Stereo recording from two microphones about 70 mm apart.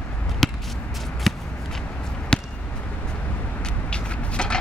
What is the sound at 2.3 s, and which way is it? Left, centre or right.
Basketball bounce, centre.